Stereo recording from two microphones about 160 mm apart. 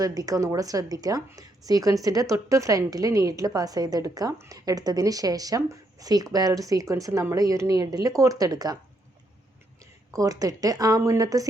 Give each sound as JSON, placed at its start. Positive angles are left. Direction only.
{"t": 0.0, "sound": "speech", "side_deg": -20}
{"t": 10.1, "sound": "speech", "side_deg": -20}